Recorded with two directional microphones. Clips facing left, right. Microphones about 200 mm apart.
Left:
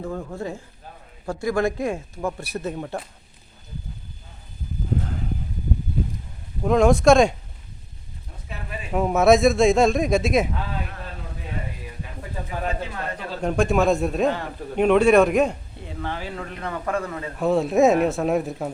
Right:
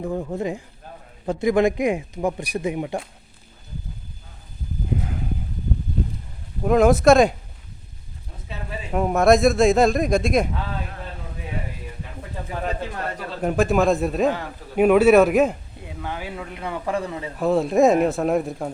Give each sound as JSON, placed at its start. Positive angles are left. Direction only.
{"t": 0.0, "sound": "speech", "side_deg": -20}
{"t": 6.6, "sound": "a man's voice", "side_deg": -5}
{"t": 8.9, "sound": "a man's voice", "side_deg": 0}
{"t": 13.4, "sound": "a man's voice", "side_deg": -5}
{"t": 17.3, "sound": "a man's voice", "side_deg": 0}